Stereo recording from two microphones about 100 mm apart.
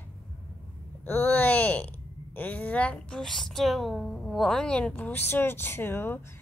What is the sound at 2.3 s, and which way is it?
A woman's voice, 15° left (ahead or behind).